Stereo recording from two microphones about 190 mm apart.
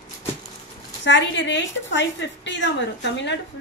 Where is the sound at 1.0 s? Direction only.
70° left (ahead or behind).